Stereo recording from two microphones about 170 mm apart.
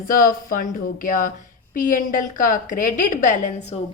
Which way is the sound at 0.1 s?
55° left (ahead or behind).